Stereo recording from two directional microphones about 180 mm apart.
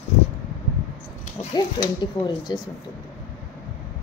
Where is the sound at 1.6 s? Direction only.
20° left (ahead or behind).